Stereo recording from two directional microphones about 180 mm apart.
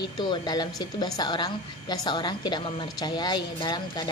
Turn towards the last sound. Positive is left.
turn(degrees=25)  # may be behind; listen again after turning